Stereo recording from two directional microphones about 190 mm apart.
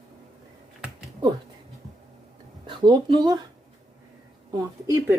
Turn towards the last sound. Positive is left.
turn(degrees=-15)  # may be behind; listen again after turning